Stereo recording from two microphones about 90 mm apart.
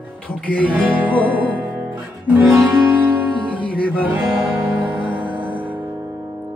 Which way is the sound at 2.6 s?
20° right (ahead or behind).